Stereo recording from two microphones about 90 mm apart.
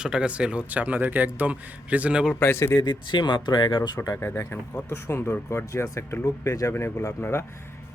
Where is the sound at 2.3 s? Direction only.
25° left (ahead or behind).